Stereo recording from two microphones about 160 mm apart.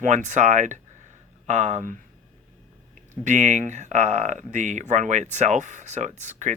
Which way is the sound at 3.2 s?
50° right (ahead or behind).